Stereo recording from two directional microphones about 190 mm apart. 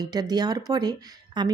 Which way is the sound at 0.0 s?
20° right (ahead or behind).